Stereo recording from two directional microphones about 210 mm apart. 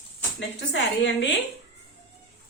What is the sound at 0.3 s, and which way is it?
Speech, 55° left (ahead or behind).